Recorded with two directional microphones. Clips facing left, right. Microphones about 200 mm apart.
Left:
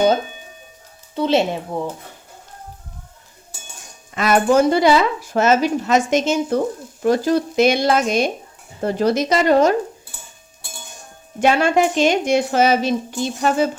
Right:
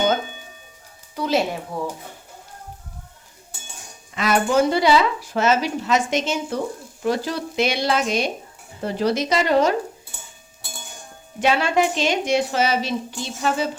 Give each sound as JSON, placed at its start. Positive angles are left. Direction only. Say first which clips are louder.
{"t": 1.1, "sound": "speech", "louder": "left 4 dB", "side_deg": 25}
{"t": 4.1, "sound": "speech", "louder": "left 4 dB", "side_deg": 50}
{"t": 11.3, "sound": "speech", "louder": "left 4 dB", "side_deg": 50}